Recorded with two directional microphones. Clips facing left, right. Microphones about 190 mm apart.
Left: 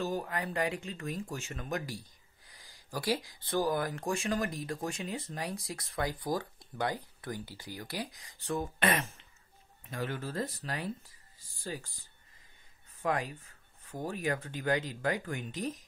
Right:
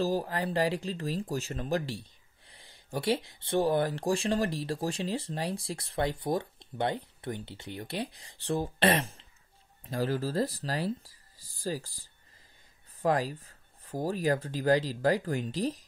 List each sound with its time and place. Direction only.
0.0 s speech: 35° right (ahead or behind)